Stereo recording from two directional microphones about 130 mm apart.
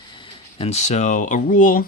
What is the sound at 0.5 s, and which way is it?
Speech, 55° left (ahead or behind).